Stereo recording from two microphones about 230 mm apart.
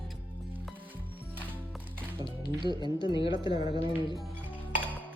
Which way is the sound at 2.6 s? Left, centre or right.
Centre.